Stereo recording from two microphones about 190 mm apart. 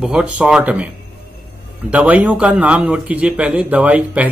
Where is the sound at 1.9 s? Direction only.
10° right (ahead or behind).